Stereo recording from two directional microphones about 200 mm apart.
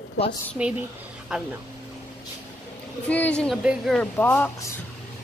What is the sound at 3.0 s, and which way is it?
Speech, 5° left (ahead or behind).